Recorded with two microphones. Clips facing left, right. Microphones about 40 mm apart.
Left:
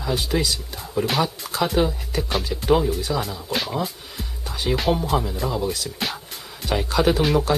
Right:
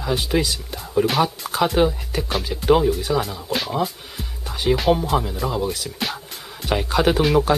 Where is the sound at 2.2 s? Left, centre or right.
Centre.